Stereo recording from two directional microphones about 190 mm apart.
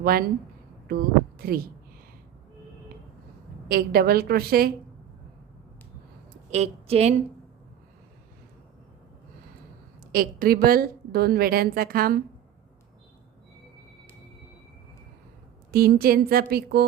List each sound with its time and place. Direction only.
0.0 s a woman's voice: 50° right (ahead or behind)
3.7 s a woman's voice: 55° right (ahead or behind)
6.5 s a woman's voice: 35° right (ahead or behind)
10.1 s a woman's voice: 50° right (ahead or behind)
15.7 s a woman's voice: 50° right (ahead or behind)